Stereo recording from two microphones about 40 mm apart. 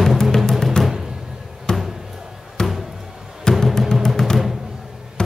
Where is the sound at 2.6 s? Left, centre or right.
Centre.